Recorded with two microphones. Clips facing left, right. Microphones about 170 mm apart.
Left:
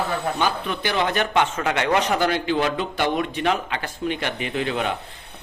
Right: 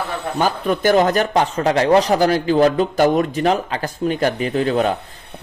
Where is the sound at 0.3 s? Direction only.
45° right (ahead or behind).